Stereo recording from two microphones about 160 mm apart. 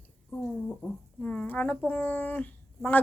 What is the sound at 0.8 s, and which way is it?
Speech, 10° left (ahead or behind).